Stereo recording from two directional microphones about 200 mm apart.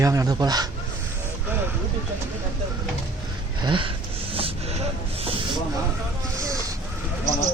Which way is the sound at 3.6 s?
25° right (ahead or behind).